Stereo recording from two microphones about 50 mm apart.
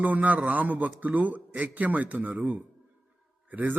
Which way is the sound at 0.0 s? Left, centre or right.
Right.